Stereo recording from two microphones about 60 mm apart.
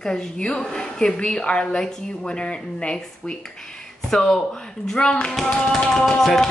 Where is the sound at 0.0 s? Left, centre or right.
Centre.